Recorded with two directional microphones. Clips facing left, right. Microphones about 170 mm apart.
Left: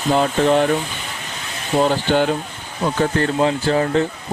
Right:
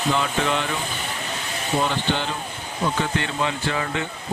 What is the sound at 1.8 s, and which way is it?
Speech, 45° left (ahead or behind).